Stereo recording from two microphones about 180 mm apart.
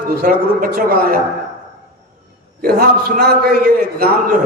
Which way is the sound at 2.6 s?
55° right (ahead or behind).